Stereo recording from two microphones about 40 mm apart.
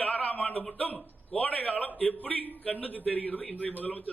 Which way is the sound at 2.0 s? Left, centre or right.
Left.